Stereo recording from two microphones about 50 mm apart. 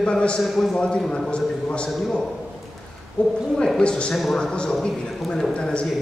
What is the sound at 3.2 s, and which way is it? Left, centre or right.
Speech, left.